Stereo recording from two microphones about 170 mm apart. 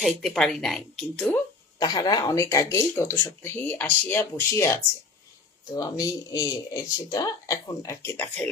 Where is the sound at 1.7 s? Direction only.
25° left (ahead or behind).